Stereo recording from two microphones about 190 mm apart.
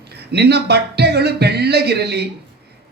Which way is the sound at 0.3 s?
60° right (ahead or behind).